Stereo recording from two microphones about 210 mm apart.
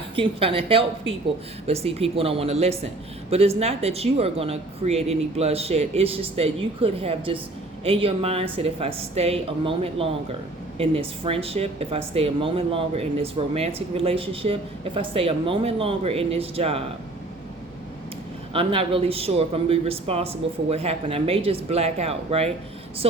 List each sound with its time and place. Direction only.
0.2 s speech: 25° right (ahead or behind)
18.5 s speech: 25° right (ahead or behind)